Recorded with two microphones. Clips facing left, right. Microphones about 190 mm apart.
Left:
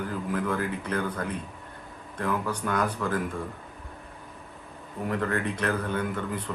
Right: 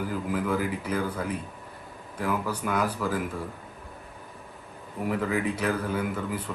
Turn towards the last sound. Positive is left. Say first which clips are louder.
# even
turn(degrees=-5)  # may be behind; listen again after turning